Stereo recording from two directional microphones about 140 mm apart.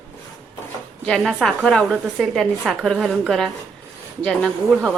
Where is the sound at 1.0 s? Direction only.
5° left (ahead or behind).